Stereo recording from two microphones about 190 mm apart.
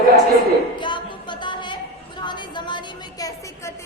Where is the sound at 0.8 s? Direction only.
25° left (ahead or behind).